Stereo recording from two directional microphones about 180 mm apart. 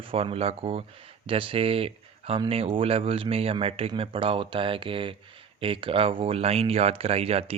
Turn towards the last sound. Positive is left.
turn(degrees=-35)  # may be behind; listen again after turning